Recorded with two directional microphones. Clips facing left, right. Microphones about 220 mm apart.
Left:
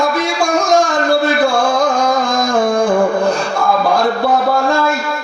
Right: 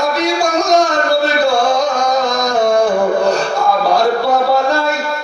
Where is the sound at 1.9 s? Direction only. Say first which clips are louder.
Even; 50° left (ahead or behind).